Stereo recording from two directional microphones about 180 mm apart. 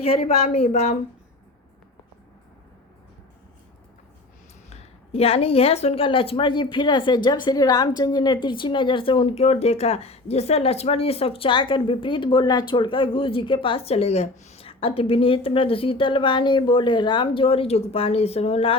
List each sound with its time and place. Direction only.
0.0 s speech: 35° left (ahead or behind)
4.7 s speech: 35° left (ahead or behind)